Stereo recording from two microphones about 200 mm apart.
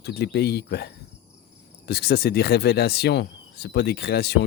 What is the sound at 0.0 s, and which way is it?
Speech, 55° left (ahead or behind).